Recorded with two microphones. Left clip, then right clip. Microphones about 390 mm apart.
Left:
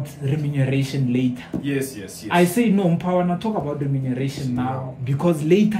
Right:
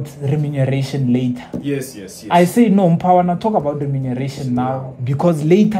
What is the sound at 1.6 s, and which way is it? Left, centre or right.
Speech, centre.